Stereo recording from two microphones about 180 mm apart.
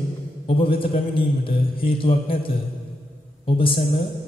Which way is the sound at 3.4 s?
30° left (ahead or behind).